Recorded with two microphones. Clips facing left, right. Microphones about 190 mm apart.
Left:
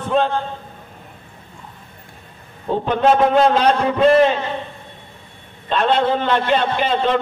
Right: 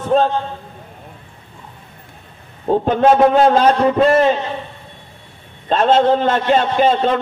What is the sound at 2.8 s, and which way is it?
A man's voice, 45° right (ahead or behind).